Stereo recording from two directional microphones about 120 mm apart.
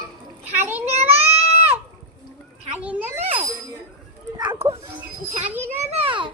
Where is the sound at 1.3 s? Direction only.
60° right (ahead or behind).